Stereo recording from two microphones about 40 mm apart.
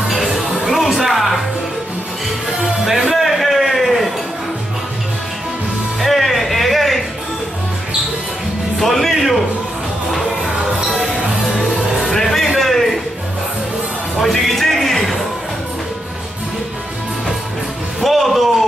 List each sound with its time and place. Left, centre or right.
0.1 s music: centre
2.8 s music: centre
5.9 s music: centre
8.7 s music: centre
11.5 s music: centre
12.5 s a sound: centre
14.2 s a sound: centre
18.0 s music: centre